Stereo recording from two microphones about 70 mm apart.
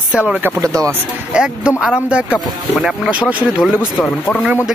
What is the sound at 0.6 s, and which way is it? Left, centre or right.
Speech, right.